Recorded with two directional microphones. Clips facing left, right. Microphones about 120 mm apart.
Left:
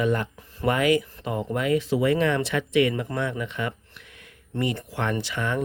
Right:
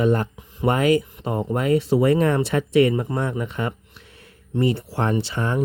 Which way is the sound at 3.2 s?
40° right (ahead or behind).